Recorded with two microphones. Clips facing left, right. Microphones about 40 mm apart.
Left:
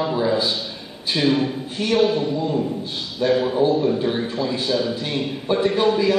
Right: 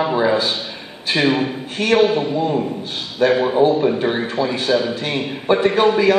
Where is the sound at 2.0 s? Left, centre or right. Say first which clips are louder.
Right 3 dB; right.